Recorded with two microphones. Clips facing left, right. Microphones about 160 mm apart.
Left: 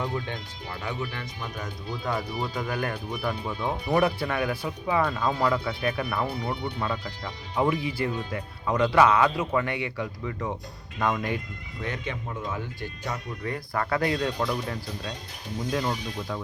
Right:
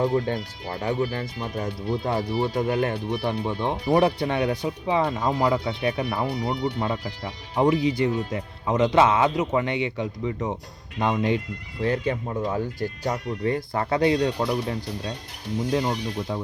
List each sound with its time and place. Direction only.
0.0 s speech: 35° right (ahead or behind)
11.8 s speech: 35° right (ahead or behind); by 14.5 s 15° right (ahead or behind)
15.8 s speech: 30° right (ahead or behind)